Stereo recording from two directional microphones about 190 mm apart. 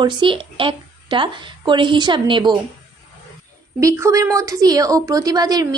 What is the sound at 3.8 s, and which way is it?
A woman's voice, 15° right (ahead or behind).